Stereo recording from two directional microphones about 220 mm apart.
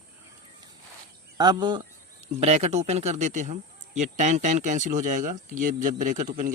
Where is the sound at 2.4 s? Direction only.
30° right (ahead or behind).